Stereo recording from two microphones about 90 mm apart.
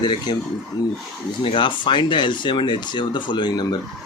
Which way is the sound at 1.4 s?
70° left (ahead or behind).